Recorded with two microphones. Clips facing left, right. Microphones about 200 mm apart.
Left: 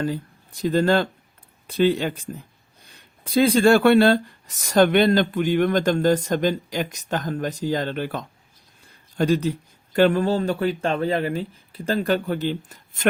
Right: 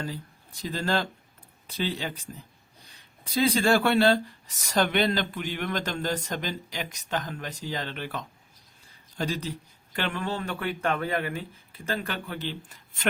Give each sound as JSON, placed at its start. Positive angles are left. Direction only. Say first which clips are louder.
{"t": 0.6, "sound": "speech", "louder": "left 9 dB", "side_deg": 55}
{"t": 3.2, "sound": "speech", "louder": "left 7 dB", "side_deg": 55}
{"t": 9.1, "sound": "speech", "louder": "left 10 dB", "side_deg": 55}